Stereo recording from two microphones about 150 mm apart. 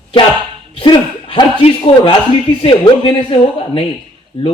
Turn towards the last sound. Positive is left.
turn(degrees=40)  # may be behind; listen again after turning